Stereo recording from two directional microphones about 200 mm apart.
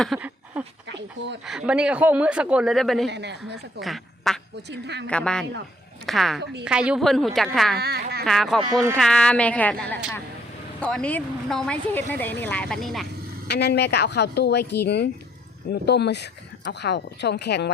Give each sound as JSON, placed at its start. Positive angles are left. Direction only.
{"t": 0.0, "sound": "a sound", "side_deg": -5}
{"t": 1.5, "sound": "speech", "side_deg": -5}
{"t": 3.1, "sound": "speech", "side_deg": -60}
{"t": 3.8, "sound": "speech", "side_deg": 0}
{"t": 4.7, "sound": "speech", "side_deg": -60}
{"t": 5.0, "sound": "speech", "side_deg": 5}
{"t": 6.4, "sound": "speech", "side_deg": -60}
{"t": 6.7, "sound": "speech", "side_deg": -5}
{"t": 7.8, "sound": "speech", "side_deg": -55}
{"t": 8.2, "sound": "a woman's voice", "side_deg": 0}
{"t": 13.5, "sound": "speech", "side_deg": 55}